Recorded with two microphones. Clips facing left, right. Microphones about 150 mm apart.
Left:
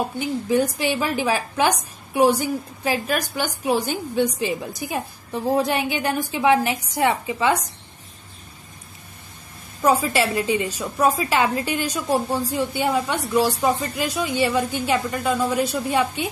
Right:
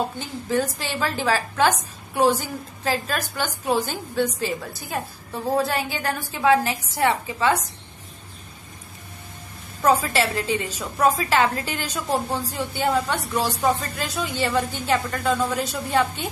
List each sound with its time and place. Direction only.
0.2 s a woman's voice: 15° left (ahead or behind)
9.8 s a woman's voice: 10° left (ahead or behind)